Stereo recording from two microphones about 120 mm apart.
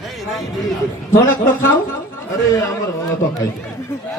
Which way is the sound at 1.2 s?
20° left (ahead or behind).